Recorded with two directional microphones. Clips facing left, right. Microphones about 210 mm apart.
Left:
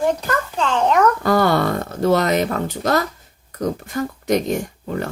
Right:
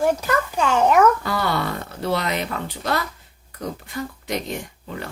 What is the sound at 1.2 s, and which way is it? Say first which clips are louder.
Speech: left 7 dB; 45° left (ahead or behind).